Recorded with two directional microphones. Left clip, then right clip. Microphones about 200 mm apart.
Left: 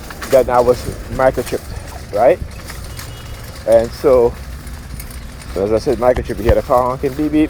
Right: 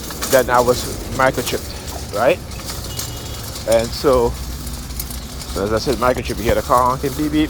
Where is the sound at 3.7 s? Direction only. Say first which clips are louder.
Left 4 dB; 40° left (ahead or behind).